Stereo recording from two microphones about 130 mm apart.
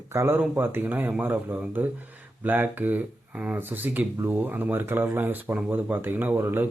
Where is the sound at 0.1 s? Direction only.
20° right (ahead or behind).